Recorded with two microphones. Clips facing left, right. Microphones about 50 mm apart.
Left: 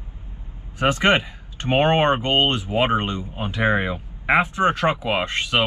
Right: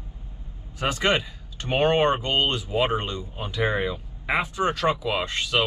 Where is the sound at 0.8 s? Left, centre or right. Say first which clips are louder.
Left 5 dB; left.